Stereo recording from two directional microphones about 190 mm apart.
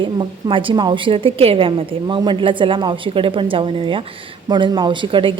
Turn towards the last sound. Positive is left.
turn(degrees=-25)  # may be behind; listen again after turning